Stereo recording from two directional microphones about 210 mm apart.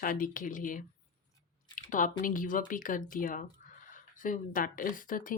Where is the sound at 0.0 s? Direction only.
40° left (ahead or behind).